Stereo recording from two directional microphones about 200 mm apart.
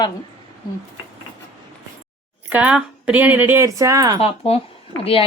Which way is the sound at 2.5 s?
5° right (ahead or behind).